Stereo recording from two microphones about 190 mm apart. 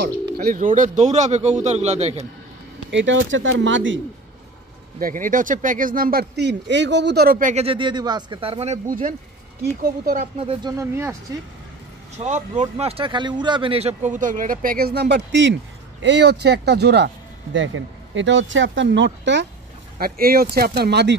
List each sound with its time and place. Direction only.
0.0 s speech: 50° right (ahead or behind); by 2.2 s 35° right (ahead or behind)
2.9 s speech: 80° right
5.0 s speech: 45° right (ahead or behind)
7.6 s speech: 25° right (ahead or behind); by 10.2 s 50° right (ahead or behind)
10.4 s speech: 25° right (ahead or behind)
10.8 s speech: 15° right (ahead or behind)
12.2 s speech: 40° right (ahead or behind); by 19.4 s 70° right (ahead or behind)
20.0 s speech: 50° right (ahead or behind)